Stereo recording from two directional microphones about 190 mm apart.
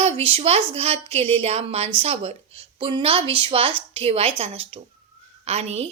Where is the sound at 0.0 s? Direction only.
35° right (ahead or behind).